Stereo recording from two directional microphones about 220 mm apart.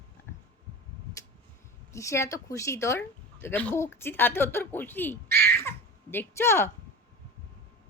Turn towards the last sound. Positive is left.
turn(degrees=10)  # may be behind; listen again after turning